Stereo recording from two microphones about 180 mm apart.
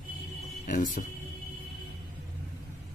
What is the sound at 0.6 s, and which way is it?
Speech, 50° left (ahead or behind).